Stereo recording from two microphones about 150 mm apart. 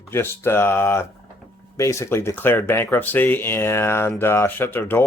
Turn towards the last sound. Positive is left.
turn(degrees=15)  # may be behind; listen again after turning